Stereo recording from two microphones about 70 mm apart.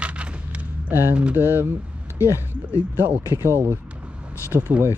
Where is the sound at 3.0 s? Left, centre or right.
Right.